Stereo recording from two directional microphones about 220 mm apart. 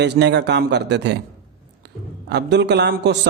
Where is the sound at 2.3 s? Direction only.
50° right (ahead or behind).